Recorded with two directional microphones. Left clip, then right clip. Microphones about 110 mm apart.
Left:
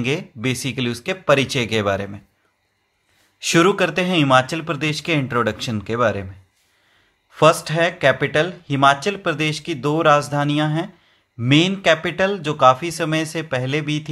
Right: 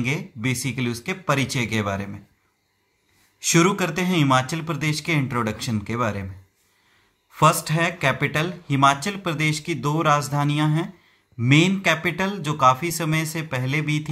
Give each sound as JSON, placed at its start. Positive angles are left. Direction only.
{"t": 0.0, "sound": "speech", "side_deg": 30}
{"t": 3.3, "sound": "speech", "side_deg": 25}
{"t": 7.2, "sound": "speech", "side_deg": 20}